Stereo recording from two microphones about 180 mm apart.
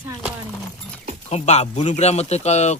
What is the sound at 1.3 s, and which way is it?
Speech, 40° left (ahead or behind).